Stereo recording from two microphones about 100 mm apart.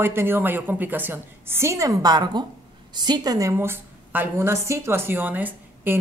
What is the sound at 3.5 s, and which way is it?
Speech, 25° right (ahead or behind).